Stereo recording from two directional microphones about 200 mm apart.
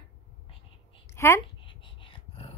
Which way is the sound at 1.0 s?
15° left (ahead or behind).